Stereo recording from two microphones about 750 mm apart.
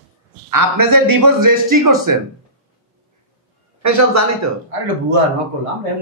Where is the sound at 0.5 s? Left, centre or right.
Right.